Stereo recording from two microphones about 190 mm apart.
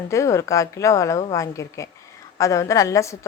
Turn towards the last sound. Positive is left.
turn(degrees=15)  # may be behind; listen again after turning